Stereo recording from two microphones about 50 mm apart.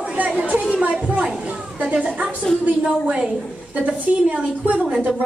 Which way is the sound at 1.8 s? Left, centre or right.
Right.